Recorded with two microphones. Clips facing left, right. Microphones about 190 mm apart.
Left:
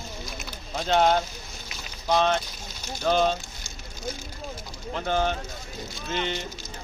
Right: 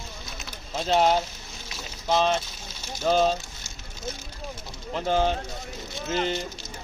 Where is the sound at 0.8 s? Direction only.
Centre (ahead or behind).